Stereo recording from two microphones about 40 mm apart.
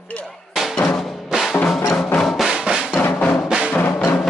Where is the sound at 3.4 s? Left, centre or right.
Centre.